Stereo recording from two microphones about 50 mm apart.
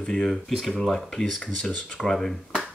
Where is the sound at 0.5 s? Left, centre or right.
Centre.